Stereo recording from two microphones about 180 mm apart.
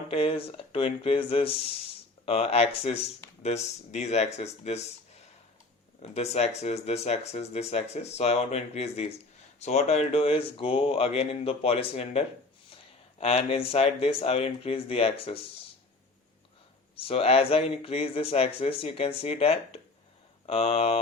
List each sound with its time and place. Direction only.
0.1 s speech: 30° left (ahead or behind)
6.0 s speech: 35° left (ahead or behind)
16.9 s speech: 30° left (ahead or behind)